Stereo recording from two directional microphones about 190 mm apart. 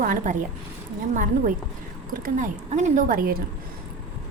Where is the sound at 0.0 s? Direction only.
45° right (ahead or behind).